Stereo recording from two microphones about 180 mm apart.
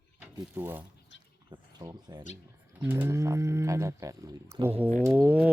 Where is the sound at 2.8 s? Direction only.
10° right (ahead or behind).